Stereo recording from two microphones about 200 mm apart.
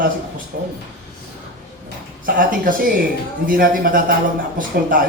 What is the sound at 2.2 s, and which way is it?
A man's voice, 45° right (ahead or behind).